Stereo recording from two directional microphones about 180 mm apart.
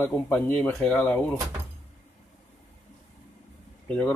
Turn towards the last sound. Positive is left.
turn(degrees=10)  # may be behind; listen again after turning